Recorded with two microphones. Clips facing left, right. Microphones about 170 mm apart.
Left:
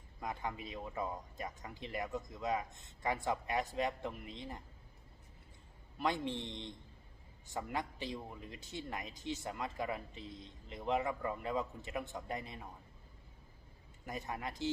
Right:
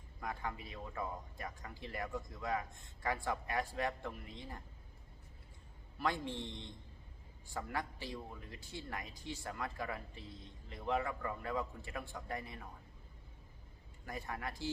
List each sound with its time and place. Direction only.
0.2 s speech: 20° left (ahead or behind)
6.0 s speech: 20° left (ahead or behind)
14.0 s speech: 20° left (ahead or behind)